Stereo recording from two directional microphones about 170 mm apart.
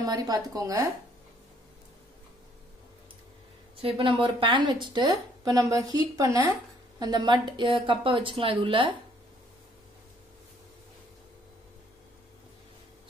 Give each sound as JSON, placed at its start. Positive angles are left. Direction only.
{"t": 0.0, "sound": "speech", "side_deg": -20}
{"t": 3.7, "sound": "speech", "side_deg": -30}